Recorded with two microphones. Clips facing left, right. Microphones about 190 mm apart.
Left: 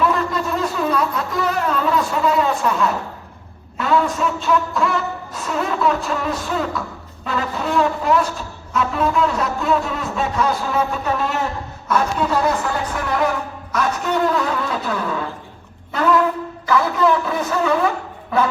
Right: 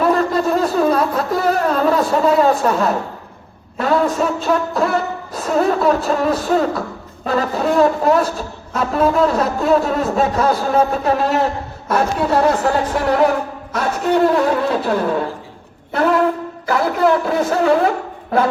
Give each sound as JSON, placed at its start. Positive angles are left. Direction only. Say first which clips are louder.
{"t": 0.0, "sound": "a sound", "louder": "right 4 dB", "side_deg": -40}
{"t": 3.8, "sound": "a woman's voice", "louder": "right 3 dB", "side_deg": -40}
{"t": 12.9, "sound": "speech", "louder": "right 5 dB", "side_deg": -55}